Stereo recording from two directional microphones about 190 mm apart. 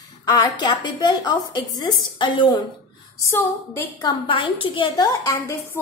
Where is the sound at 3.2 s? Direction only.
15° left (ahead or behind).